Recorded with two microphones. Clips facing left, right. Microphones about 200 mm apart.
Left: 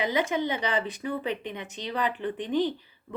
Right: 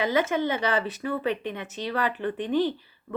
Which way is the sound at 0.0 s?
15° left (ahead or behind).